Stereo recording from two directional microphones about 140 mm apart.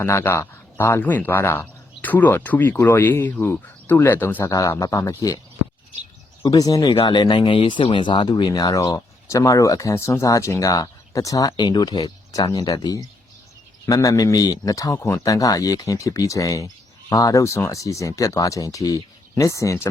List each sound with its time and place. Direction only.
0.0 s speech: 15° left (ahead or behind)
6.4 s speech: 25° left (ahead or behind)